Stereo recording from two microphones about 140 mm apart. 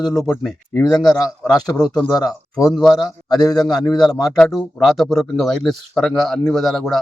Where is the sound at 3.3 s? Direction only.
30° left (ahead or behind).